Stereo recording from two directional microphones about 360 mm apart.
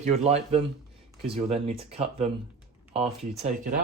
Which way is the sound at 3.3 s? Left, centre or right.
Centre.